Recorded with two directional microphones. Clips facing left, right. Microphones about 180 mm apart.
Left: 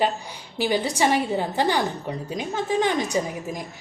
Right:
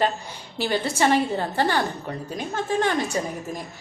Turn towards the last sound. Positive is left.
turn(degrees=15)  # may be behind; listen again after turning